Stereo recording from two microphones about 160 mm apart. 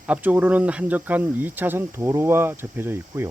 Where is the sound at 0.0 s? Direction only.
10° right (ahead or behind).